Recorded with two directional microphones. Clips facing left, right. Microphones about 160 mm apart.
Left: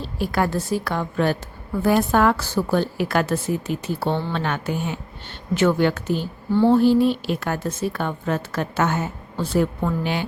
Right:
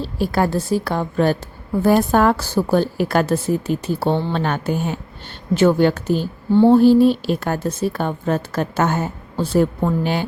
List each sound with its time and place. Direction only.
0.0 s a woman's voice: 35° right (ahead or behind)